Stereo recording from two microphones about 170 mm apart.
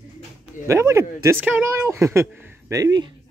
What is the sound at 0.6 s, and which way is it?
Speech, 15° right (ahead or behind).